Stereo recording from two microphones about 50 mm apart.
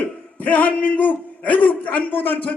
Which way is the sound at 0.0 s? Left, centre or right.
Left.